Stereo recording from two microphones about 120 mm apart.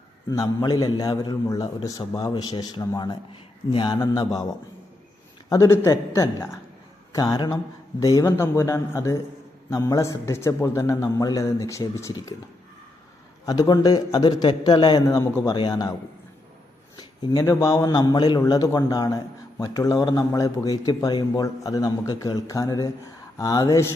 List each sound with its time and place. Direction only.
0.3 s a man's voice: 30° left (ahead or behind)
4.0 s a man's voice: 30° left (ahead or behind)
5.5 s a man's voice: 25° left (ahead or behind)
13.4 s a man's voice: 30° left (ahead or behind)
17.4 s a man's voice: 30° left (ahead or behind)